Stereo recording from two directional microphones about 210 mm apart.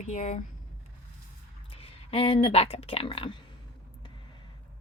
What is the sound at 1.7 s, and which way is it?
Speech, 25° left (ahead or behind).